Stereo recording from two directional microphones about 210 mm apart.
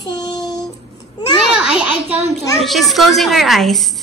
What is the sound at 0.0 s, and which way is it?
Child singing, 20° left (ahead or behind).